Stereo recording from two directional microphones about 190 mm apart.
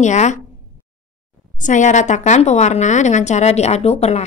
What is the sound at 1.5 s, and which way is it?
A woman's voice, 40° left (ahead or behind).